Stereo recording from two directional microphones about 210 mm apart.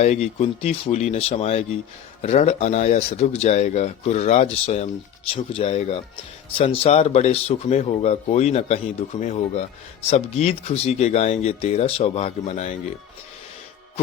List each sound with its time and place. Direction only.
0.0 s speech: 35° left (ahead or behind)